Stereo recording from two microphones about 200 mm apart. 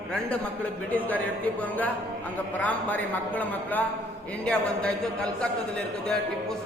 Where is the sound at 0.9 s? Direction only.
10° left (ahead or behind).